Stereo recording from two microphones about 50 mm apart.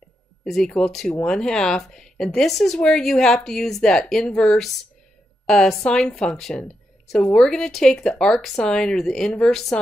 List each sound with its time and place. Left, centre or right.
0.5 s speech: centre